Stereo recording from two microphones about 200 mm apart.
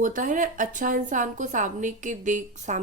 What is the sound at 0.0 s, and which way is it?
A woman's voice, 40° right (ahead or behind).